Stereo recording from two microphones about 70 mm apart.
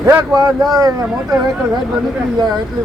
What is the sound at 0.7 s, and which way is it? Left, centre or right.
Speech, right.